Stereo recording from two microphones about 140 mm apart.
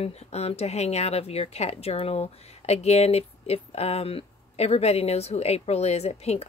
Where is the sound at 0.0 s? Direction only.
50° left (ahead or behind).